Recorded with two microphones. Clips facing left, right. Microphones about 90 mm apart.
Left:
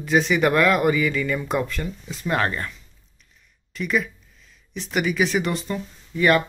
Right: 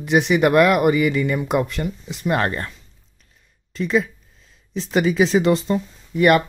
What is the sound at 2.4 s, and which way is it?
Speech, 35° right (ahead or behind).